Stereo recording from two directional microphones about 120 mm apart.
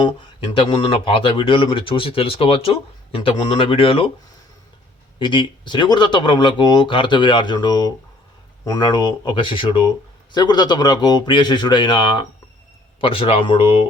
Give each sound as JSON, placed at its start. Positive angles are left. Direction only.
{"t": 0.0, "sound": "speech", "side_deg": 45}
{"t": 5.2, "sound": "speech", "side_deg": 40}
{"t": 13.0, "sound": "speech", "side_deg": 50}